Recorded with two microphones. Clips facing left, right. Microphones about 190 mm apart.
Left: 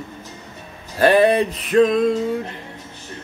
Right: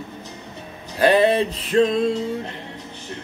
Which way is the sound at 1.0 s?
20° right (ahead or behind).